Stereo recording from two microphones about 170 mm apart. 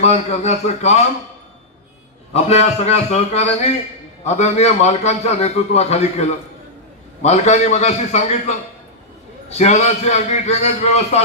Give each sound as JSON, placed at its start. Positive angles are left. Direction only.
{"t": 0.0, "sound": "a man's voice", "side_deg": 40}
{"t": 2.3, "sound": "a man's voice", "side_deg": 40}